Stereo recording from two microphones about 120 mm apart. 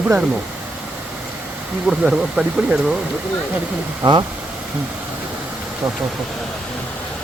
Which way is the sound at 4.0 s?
35° right (ahead or behind).